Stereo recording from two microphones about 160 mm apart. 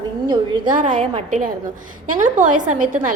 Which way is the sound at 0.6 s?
55° right (ahead or behind).